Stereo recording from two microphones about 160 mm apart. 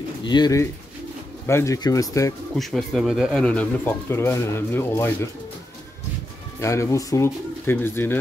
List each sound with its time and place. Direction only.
0.2 s speech: 25° left (ahead or behind)
2.5 s speech: centre (ahead or behind)
3.4 s speech: 10° left (ahead or behind)
6.6 s speech: 20° left (ahead or behind)